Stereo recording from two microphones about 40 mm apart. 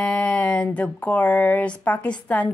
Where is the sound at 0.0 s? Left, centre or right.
Left.